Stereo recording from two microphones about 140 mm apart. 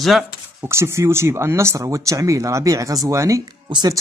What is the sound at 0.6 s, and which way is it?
Speech, 20° right (ahead or behind).